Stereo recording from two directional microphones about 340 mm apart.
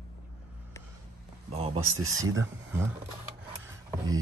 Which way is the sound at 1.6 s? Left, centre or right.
Centre.